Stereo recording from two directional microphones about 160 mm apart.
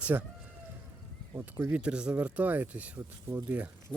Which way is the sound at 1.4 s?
15° right (ahead or behind).